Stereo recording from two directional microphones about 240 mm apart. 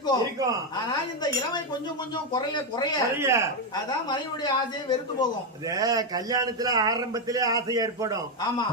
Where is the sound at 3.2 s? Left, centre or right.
Centre.